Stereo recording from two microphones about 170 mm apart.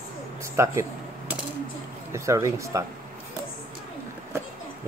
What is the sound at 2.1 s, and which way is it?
Speech, 20° right (ahead or behind).